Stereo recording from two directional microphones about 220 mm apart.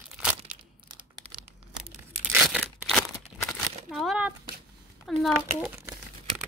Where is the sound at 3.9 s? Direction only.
Centre (ahead or behind).